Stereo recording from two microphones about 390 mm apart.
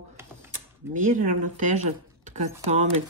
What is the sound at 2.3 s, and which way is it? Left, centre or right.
Speech, centre.